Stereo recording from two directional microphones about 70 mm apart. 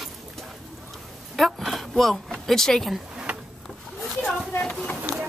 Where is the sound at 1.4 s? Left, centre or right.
Centre.